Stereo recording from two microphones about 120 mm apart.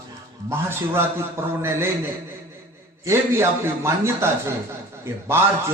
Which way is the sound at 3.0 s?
20° right (ahead or behind).